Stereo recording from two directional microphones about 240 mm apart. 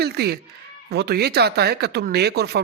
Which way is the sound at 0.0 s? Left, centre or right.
Right.